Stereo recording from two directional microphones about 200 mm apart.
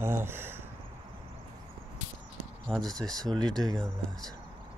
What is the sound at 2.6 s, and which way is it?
Speech, 5° left (ahead or behind).